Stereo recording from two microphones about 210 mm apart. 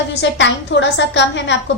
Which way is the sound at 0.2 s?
60° left (ahead or behind).